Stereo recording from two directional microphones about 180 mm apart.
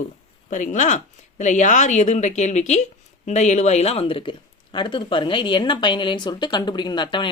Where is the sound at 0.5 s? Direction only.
45° left (ahead or behind).